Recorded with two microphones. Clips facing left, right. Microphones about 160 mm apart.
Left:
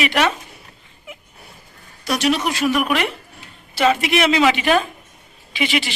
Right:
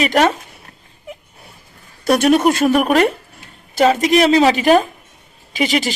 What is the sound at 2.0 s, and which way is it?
A woman's voice, 50° right (ahead or behind).